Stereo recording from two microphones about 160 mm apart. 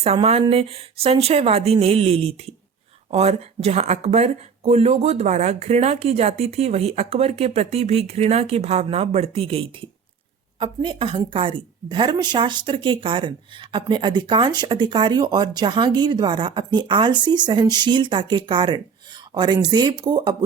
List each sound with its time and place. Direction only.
0.0 s a woman's voice: 40° right (ahead or behind)